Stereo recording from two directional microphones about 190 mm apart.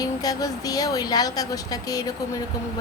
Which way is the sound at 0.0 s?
20° left (ahead or behind).